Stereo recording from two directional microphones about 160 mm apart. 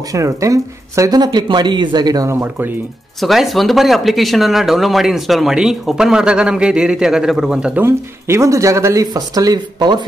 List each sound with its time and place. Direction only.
0.1 s speech: 20° right (ahead or behind)
3.2 s speech: centre (ahead or behind); by 10.0 s 25° right (ahead or behind)